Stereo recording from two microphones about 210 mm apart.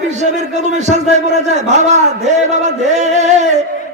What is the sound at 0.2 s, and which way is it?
A man's voice, 35° right (ahead or behind).